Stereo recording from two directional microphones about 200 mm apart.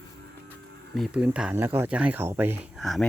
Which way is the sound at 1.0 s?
5° right (ahead or behind).